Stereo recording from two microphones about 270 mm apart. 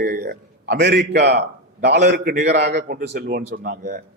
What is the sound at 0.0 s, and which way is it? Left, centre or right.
A man's voice, right.